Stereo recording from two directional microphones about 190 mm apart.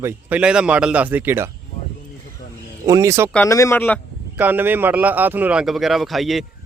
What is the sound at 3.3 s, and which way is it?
Speech, 15° left (ahead or behind).